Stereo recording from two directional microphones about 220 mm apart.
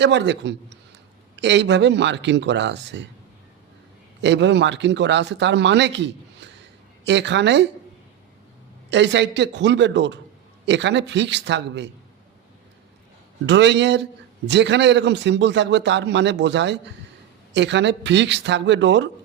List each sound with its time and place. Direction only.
0.0 s a man's voice: 50° right (ahead or behind)
4.2 s a man's voice: 55° right (ahead or behind)
8.9 s a man's voice: 55° right (ahead or behind)
13.4 s a man's voice: 55° right (ahead or behind)